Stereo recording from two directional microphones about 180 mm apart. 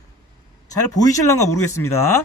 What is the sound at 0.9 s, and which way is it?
A man's voice, 15° left (ahead or behind).